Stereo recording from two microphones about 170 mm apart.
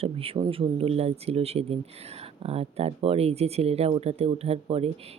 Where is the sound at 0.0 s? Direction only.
35° right (ahead or behind).